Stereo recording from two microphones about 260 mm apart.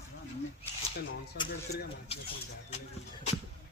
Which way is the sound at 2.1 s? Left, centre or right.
Left.